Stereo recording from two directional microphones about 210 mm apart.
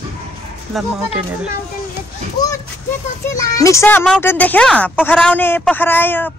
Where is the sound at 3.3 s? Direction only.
15° left (ahead or behind).